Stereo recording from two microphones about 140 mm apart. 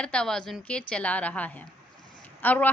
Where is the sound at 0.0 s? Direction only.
5° left (ahead or behind).